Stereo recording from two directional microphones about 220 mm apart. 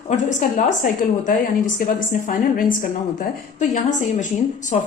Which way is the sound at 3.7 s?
35° left (ahead or behind).